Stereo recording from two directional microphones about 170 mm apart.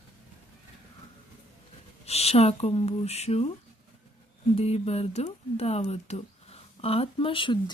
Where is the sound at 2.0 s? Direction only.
35° left (ahead or behind).